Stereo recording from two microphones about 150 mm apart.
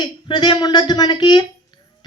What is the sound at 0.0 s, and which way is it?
Speech, 30° left (ahead or behind).